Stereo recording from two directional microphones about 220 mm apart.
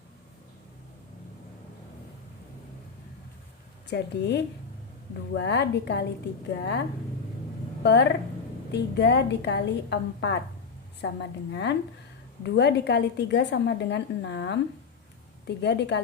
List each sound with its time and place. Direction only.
3.8 s a woman's voice: 50° left (ahead or behind)
7.9 s a woman's voice: 50° left (ahead or behind)